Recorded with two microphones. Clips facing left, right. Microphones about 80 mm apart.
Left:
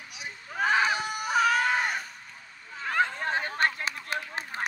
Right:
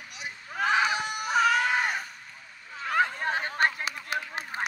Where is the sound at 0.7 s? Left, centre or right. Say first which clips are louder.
Even; centre.